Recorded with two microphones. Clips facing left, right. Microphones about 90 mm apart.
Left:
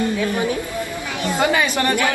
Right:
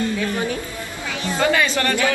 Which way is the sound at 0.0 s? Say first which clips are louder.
Left 2 dB; 15° left (ahead or behind).